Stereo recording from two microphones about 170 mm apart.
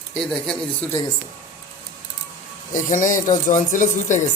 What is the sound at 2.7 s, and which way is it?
A man's voice, 50° left (ahead or behind).